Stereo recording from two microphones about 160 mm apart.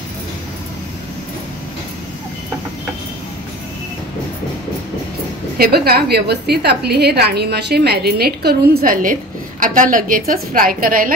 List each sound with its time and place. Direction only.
5.6 s a woman's voice: 75° right (ahead or behind); by 11.1 s 60° right (ahead or behind)